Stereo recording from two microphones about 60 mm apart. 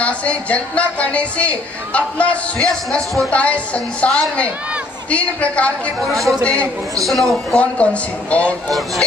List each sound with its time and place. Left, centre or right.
0.0 s speech: left
2.6 s speech: centre
3.3 s speech: left
5.1 s speech: left
5.9 s speech: centre
7.5 s speech: left